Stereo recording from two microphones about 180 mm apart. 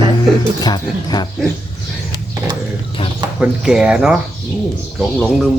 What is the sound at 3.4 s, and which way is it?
Speech, 5° right (ahead or behind).